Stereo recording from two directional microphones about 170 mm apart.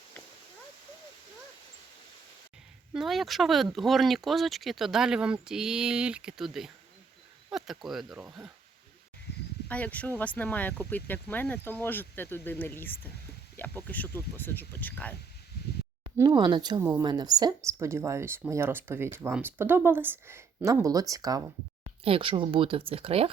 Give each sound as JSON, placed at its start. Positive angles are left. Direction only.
{"t": 2.9, "sound": "speech", "side_deg": 0}
{"t": 9.6, "sound": "speech", "side_deg": 10}
{"t": 16.1, "sound": "speech", "side_deg": -25}
{"t": 22.0, "sound": "speech", "side_deg": -30}